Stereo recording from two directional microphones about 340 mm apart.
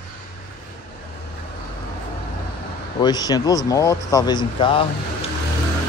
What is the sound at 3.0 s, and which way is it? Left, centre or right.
Speech, centre.